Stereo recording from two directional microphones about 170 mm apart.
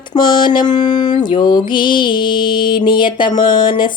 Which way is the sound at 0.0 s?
25° left (ahead or behind).